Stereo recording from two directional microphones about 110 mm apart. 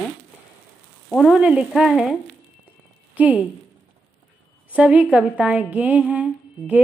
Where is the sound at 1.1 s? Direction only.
Centre (ahead or behind).